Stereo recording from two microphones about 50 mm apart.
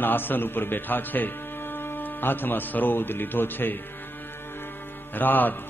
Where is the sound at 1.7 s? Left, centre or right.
Left.